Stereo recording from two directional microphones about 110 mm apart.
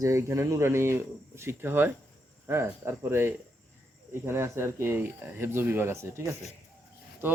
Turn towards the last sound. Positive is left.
turn(degrees=-20)  # may be behind; listen again after turning